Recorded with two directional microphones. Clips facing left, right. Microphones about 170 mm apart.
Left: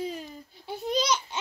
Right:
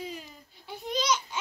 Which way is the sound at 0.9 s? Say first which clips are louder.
Left 2 dB; 35° left (ahead or behind).